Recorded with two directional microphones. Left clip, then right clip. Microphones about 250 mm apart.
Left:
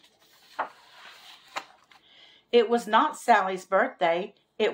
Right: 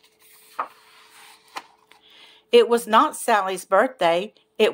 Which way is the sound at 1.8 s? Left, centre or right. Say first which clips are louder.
Right 4 dB; right.